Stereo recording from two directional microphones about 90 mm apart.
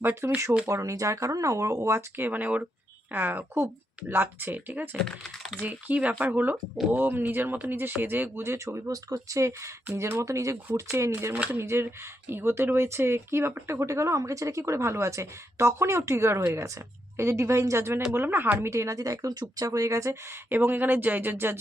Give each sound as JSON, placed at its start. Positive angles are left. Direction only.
{"t": 0.0, "sound": "speech", "side_deg": -20}
{"t": 0.7, "sound": "speech", "side_deg": -40}
{"t": 5.0, "sound": "speech", "side_deg": 0}
{"t": 5.6, "sound": "speech", "side_deg": -15}
{"t": 20.5, "sound": "speech", "side_deg": -20}